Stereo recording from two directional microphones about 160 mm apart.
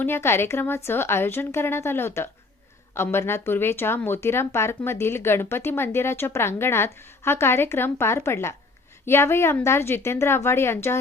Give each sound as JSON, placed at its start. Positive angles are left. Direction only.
{"t": 0.0, "sound": "speech", "side_deg": 15}